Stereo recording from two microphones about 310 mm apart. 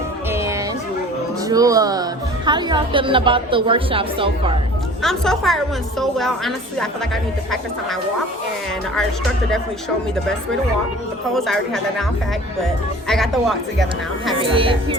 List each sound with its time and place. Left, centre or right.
0.3 s music: centre
2.5 s a woman's voice: centre
5.0 s speech: centre
11.3 s speech: centre
14.4 s a woman's voice: centre